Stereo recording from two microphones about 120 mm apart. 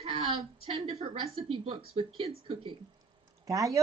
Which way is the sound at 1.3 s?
45° right (ahead or behind).